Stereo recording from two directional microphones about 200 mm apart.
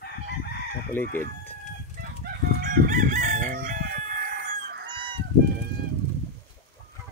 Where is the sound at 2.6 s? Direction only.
45° right (ahead or behind).